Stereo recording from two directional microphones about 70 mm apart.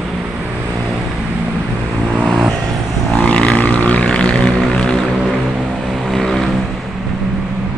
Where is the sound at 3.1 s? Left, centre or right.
Centre.